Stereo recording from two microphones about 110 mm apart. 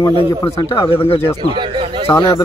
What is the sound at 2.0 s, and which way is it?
Speech, 30° left (ahead or behind).